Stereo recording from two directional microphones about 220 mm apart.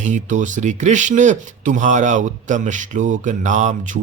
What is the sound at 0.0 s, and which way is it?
Speech, 35° right (ahead or behind).